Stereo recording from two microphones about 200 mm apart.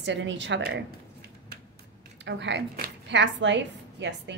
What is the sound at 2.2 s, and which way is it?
A woman's voice, 60° right (ahead or behind).